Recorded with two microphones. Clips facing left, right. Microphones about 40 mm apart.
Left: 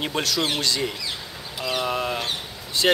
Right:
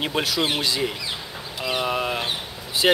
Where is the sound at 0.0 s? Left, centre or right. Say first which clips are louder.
Right 1 dB; centre.